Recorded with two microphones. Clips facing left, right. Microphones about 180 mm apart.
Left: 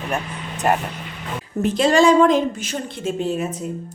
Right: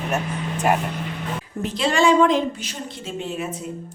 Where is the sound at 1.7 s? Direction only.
40° left (ahead or behind).